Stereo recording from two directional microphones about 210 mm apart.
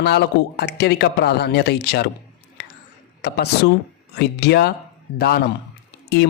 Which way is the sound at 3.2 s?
50° left (ahead or behind).